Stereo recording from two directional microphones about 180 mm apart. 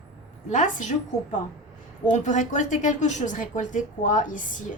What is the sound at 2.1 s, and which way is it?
A woman's voice, 40° left (ahead or behind).